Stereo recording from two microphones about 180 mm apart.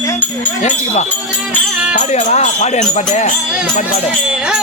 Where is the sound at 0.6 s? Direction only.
40° left (ahead or behind).